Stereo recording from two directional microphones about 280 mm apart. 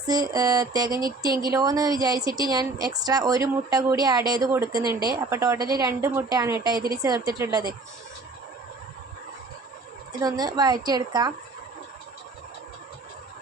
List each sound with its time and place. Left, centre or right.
0.1 s speech: centre
4.8 s speech: centre
5.0 s speech: centre
10.1 s speech: centre